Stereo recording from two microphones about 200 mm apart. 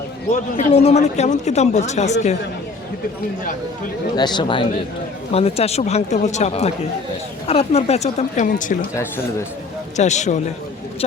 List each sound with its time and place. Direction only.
0.5 s speech: 30° left (ahead or behind)
4.1 s speech: 20° left (ahead or behind); by 8.9 s 40° left (ahead or behind)
10.0 s speech: 35° left (ahead or behind)